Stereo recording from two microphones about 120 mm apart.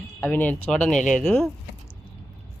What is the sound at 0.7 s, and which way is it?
Speech, 5° left (ahead or behind).